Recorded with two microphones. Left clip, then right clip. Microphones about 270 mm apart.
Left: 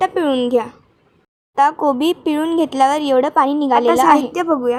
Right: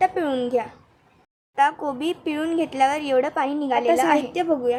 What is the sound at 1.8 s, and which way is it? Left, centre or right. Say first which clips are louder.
A woman's voice: left 10 dB; centre.